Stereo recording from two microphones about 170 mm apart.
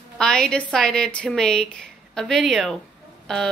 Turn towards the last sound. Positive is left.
turn(degrees=5)  # may be behind; listen again after turning